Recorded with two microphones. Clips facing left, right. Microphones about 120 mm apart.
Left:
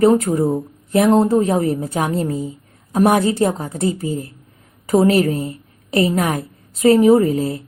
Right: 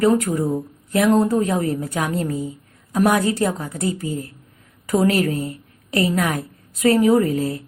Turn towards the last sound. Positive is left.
turn(degrees=25)  # may be behind; listen again after turning